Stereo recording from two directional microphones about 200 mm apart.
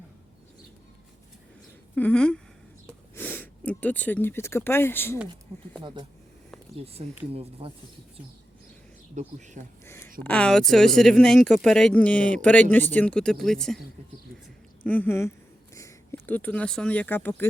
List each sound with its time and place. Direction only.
2.0 s speech: 5° left (ahead or behind)
5.8 s speech: 25° right (ahead or behind)
9.2 s speech: 35° right (ahead or behind)
9.8 s a sound: 10° left (ahead or behind)
10.2 s speech: 5° left (ahead or behind)
14.8 s speech: 10° left (ahead or behind)